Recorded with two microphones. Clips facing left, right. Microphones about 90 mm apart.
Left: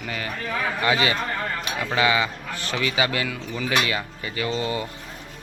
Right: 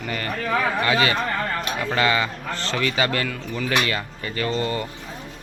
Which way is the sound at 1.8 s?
10° left (ahead or behind).